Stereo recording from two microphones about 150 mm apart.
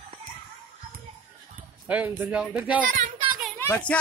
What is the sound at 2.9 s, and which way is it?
Child singing, 65° right (ahead or behind).